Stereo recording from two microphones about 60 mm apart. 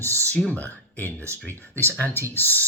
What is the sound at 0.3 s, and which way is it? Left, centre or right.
Speech, left.